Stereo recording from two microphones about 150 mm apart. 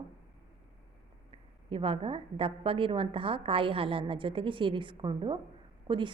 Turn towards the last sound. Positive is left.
turn(degrees=-30)  # may be behind; listen again after turning